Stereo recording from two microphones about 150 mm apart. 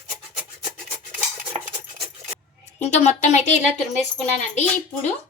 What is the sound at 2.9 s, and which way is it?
Speech, 55° left (ahead or behind).